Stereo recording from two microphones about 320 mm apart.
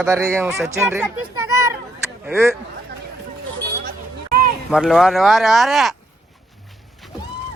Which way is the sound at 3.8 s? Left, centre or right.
Right.